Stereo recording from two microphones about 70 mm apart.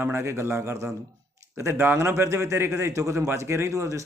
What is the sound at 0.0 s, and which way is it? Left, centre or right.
A man's voice, right.